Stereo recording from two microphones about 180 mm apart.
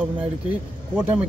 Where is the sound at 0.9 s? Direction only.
10° right (ahead or behind).